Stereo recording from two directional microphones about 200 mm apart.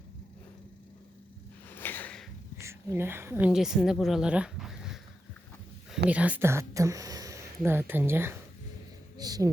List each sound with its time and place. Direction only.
1.7 s a sound: 10° left (ahead or behind)
2.6 s a woman's voice: 15° right (ahead or behind)
6.1 s speech: 5° right (ahead or behind)